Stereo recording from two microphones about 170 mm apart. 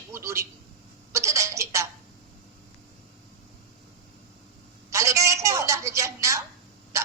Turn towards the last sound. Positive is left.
turn(degrees=-15)  # may be behind; listen again after turning